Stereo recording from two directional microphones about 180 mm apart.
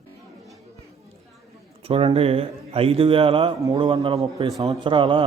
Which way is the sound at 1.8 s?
30° right (ahead or behind).